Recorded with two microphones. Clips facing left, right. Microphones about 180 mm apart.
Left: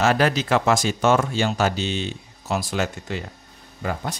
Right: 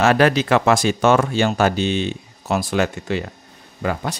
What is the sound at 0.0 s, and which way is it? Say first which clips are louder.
Speech: right 4 dB; 65° right (ahead or behind).